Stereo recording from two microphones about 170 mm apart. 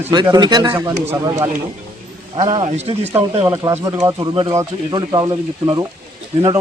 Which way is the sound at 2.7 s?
40° right (ahead or behind).